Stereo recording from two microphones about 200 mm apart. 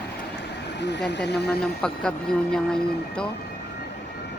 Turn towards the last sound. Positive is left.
turn(degrees=5)  # may be behind; listen again after turning